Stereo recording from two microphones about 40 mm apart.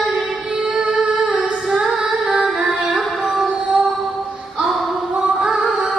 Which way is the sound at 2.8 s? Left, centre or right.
Centre.